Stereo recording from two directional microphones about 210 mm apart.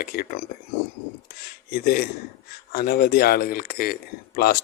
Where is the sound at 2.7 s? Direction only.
45° left (ahead or behind).